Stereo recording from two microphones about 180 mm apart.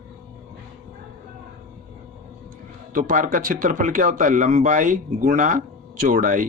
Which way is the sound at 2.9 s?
50° right (ahead or behind).